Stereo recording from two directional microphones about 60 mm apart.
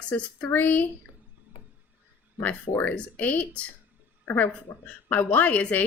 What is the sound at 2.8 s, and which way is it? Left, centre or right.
A woman's voice, left.